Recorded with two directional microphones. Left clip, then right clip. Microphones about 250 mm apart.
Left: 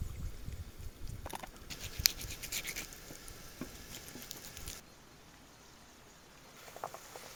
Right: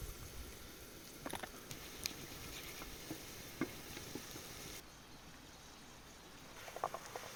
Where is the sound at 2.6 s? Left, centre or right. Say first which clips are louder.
Left 12 dB; left.